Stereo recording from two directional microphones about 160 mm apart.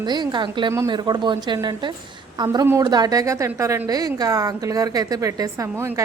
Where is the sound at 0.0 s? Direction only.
25° right (ahead or behind).